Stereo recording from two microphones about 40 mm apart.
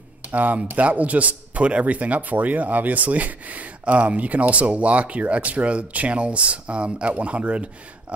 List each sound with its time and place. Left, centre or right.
0.3 s speech: right